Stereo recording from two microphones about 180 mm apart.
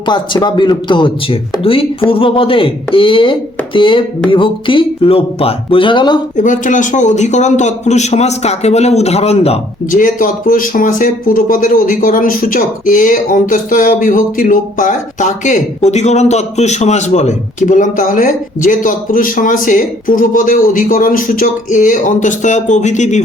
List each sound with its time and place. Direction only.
0.0 s speech: 25° left (ahead or behind)
6.3 s a man's voice: 45° left (ahead or behind)
9.9 s speech: 45° left (ahead or behind)